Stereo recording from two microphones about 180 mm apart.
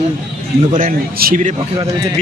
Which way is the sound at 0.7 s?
50° right (ahead or behind).